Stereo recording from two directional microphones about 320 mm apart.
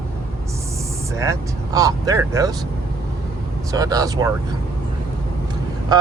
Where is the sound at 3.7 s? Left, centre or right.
Centre.